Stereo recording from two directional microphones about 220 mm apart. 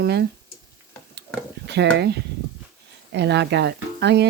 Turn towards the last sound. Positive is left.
turn(degrees=-50)  # may be behind; listen again after turning